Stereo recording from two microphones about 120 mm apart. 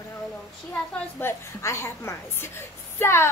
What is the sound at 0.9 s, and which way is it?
A woman's voice, 20° left (ahead or behind).